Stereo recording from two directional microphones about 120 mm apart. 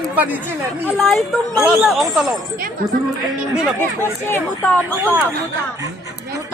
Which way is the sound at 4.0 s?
20° left (ahead or behind).